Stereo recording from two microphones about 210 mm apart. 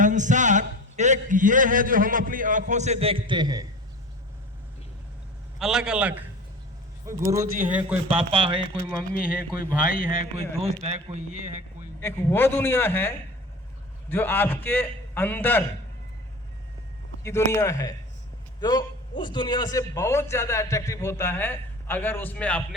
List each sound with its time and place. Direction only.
0.0 s a man's voice: 35° right (ahead or behind); by 3.7 s 20° right (ahead or behind)
5.5 s a man's voice: 5° right (ahead or behind)
7.3 s a man's voice: 40° right (ahead or behind)
7.7 s speech: 5° right (ahead or behind)
8.1 s speech: 25° right (ahead or behind)
9.1 s speech: 45° left (ahead or behind)
10.6 s a man's voice: 30° right (ahead or behind)
11.4 s a sound: 35° right (ahead or behind)
11.9 s a man's voice: 10° left (ahead or behind)
17.2 s a man's voice: 15° left (ahead or behind)